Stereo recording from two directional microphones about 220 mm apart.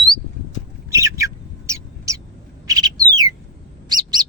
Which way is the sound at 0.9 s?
15° right (ahead or behind).